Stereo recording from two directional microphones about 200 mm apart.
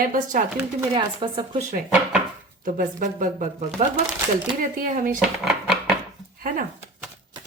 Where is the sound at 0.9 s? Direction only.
25° right (ahead or behind).